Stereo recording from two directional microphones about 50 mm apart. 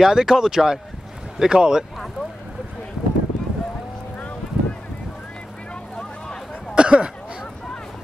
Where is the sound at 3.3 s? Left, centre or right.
Centre.